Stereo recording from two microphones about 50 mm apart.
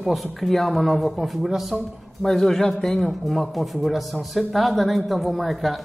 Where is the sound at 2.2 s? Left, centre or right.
Centre.